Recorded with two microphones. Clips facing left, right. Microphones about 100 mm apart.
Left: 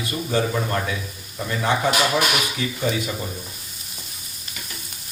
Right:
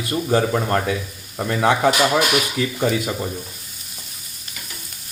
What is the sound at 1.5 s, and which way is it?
Speech, 70° right (ahead or behind).